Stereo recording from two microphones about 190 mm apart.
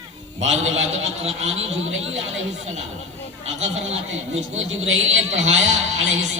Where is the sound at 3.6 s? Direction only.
35° right (ahead or behind).